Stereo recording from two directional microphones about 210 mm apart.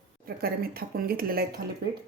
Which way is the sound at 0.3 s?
45° right (ahead or behind).